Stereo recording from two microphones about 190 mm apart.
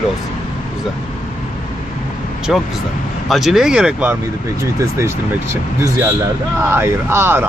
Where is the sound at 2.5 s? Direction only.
Centre (ahead or behind).